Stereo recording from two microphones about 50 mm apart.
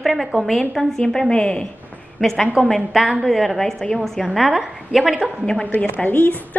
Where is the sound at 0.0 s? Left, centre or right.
Centre.